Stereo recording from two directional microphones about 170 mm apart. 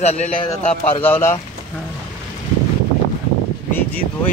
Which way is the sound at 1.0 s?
15° left (ahead or behind).